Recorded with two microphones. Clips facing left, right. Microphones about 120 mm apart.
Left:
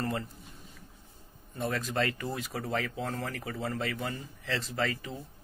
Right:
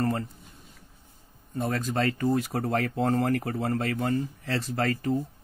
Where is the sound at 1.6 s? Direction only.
40° right (ahead or behind).